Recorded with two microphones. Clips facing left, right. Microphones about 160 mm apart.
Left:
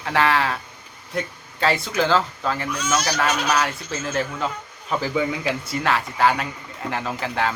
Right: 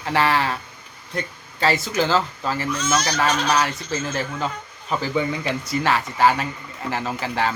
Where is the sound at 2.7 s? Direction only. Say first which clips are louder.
Right 2 dB; 10° left (ahead or behind).